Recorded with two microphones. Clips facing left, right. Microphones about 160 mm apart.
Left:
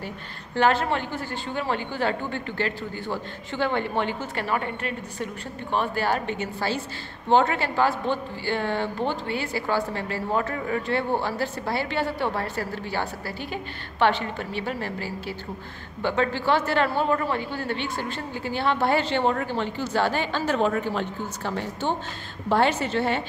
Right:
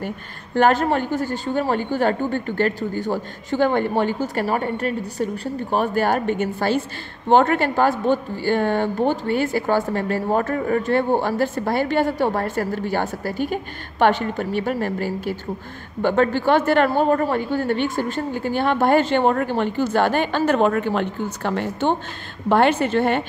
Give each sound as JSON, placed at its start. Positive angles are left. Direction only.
{"t": 0.6, "sound": "a woman's voice", "side_deg": -45}